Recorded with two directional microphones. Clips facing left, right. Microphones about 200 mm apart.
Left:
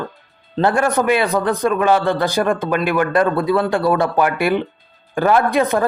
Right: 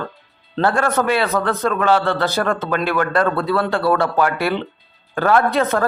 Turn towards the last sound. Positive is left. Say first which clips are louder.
# left 1 dB
turn(degrees=15)  # may be behind; listen again after turning